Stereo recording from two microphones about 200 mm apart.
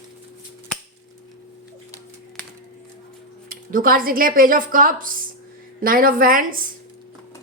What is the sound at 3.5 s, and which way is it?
Speech, 45° right (ahead or behind).